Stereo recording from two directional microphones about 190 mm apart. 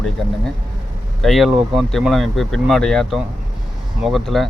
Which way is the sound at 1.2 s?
Centre (ahead or behind).